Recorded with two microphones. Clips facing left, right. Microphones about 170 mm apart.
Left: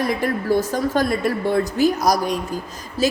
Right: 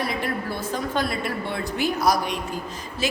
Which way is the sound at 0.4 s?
45° left (ahead or behind).